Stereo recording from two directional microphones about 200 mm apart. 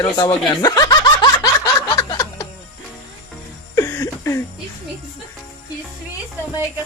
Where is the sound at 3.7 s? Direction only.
15° left (ahead or behind).